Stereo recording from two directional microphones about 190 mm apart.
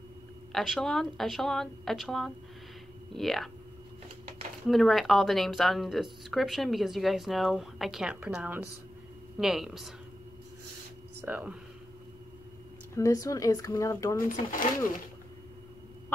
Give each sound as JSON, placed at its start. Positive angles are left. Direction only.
{"t": 0.5, "sound": "speech", "side_deg": 0}
{"t": 4.6, "sound": "speech", "side_deg": 0}
{"t": 11.1, "sound": "speech", "side_deg": -10}
{"t": 12.9, "sound": "speech", "side_deg": 15}
{"t": 14.3, "sound": "speech", "side_deg": 45}